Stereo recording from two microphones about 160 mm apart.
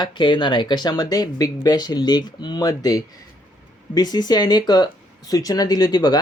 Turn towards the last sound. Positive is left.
turn(degrees=25)  # may be behind; listen again after turning